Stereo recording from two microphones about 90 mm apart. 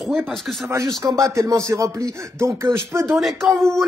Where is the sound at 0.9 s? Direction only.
40° right (ahead or behind).